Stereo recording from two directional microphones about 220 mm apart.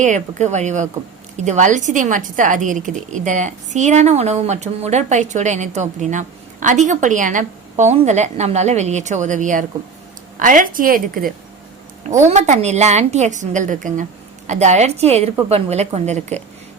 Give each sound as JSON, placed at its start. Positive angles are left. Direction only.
{"t": 0.0, "sound": "a woman's voice", "side_deg": -35}